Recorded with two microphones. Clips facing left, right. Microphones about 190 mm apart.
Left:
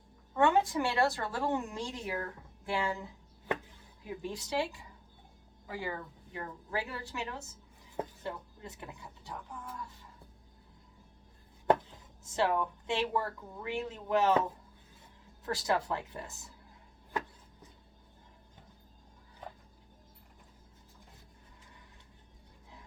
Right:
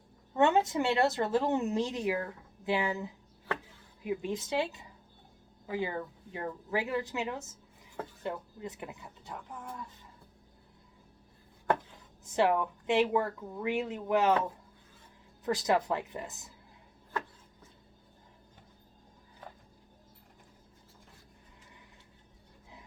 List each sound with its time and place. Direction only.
0.3 s a woman's voice: 25° right (ahead or behind)
12.3 s speech: 15° right (ahead or behind)
15.4 s a woman's voice: 20° right (ahead or behind)
17.1 s a sound: 15° left (ahead or behind)